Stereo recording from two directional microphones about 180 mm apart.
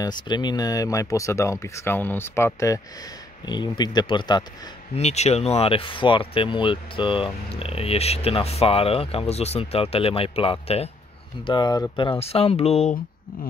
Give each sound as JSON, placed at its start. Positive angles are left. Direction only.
{"t": 0.0, "sound": "speech", "side_deg": 25}
{"t": 4.9, "sound": "speech", "side_deg": 35}